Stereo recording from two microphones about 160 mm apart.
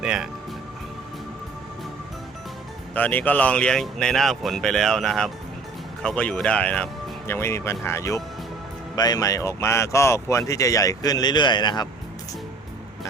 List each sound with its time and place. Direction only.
0.0 s speech: 5° right (ahead or behind)
2.9 s speech: 10° left (ahead or behind); by 11.9 s 25° left (ahead or behind)